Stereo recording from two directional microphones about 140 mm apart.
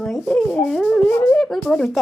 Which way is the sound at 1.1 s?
15° left (ahead or behind).